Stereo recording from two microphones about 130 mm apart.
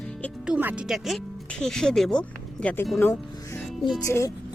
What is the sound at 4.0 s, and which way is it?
Speech, 25° left (ahead or behind).